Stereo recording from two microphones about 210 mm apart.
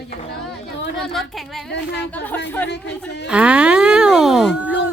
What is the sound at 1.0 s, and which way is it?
A woman's voice, centre (ahead or behind).